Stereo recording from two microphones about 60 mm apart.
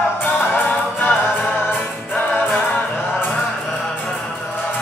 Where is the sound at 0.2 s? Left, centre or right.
Left.